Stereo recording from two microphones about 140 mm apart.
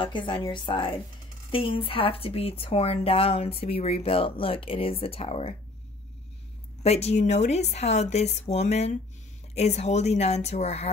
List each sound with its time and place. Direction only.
0.0 s a woman's voice: 35° left (ahead or behind)
6.8 s speech: 50° left (ahead or behind)